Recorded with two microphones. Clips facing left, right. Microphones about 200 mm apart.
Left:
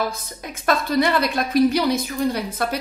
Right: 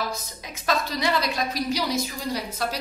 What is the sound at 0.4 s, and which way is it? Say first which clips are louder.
A woman's voice: left 5 dB; 55° left (ahead or behind).